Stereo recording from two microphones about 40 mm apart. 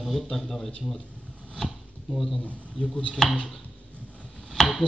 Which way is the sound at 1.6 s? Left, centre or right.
Centre.